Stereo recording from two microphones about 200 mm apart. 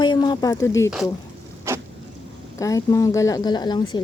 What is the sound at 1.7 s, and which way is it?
Vehicle, 15° right (ahead or behind).